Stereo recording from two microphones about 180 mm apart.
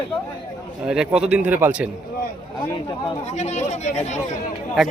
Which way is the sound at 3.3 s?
40° left (ahead or behind).